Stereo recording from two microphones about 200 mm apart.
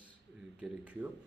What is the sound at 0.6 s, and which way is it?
Speech, 5° right (ahead or behind).